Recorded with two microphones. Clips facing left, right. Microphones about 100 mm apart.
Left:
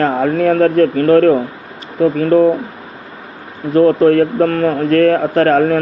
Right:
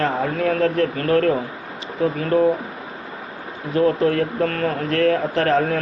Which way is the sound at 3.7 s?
50° left (ahead or behind).